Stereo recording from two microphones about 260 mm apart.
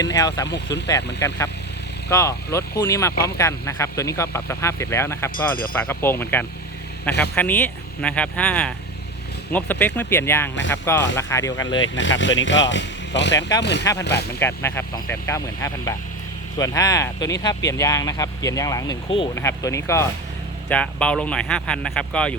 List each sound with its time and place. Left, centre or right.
0.0 s speech: centre
0.4 s speech: left
0.9 s speech: centre
11.8 s speech: left
14.3 s speech: centre